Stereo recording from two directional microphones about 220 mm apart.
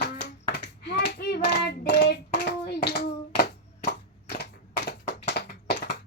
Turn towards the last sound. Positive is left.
turn(degrees=50)  # may be behind; listen again after turning